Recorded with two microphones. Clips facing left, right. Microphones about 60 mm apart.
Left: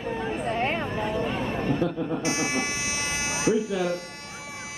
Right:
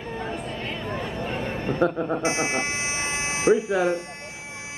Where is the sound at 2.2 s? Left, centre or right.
Right.